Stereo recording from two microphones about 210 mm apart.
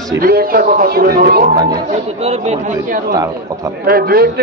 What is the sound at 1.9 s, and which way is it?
Speech, 30° right (ahead or behind).